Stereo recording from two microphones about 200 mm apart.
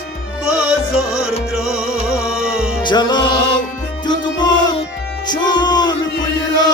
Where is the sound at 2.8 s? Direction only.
20° left (ahead or behind).